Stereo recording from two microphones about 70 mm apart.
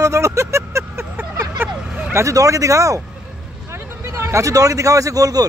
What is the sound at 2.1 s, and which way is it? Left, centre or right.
Speech, right.